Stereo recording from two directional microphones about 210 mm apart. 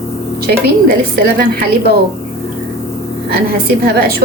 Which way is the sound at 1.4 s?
45° right (ahead or behind).